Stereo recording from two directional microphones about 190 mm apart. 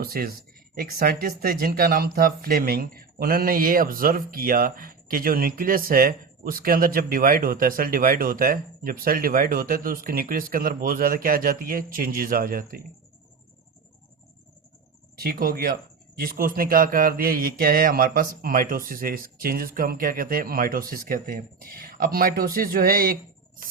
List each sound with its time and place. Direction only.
0.0 s speech: 55° right (ahead or behind)
15.2 s speech: 50° right (ahead or behind)